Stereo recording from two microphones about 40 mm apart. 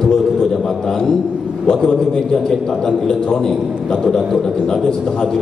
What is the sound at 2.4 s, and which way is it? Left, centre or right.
A man's voice, centre.